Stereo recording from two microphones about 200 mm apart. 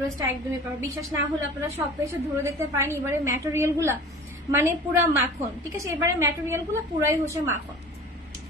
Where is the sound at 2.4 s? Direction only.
10° right (ahead or behind).